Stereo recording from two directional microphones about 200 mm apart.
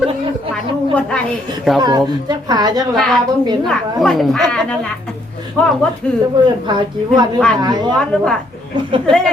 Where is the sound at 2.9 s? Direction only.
Centre (ahead or behind).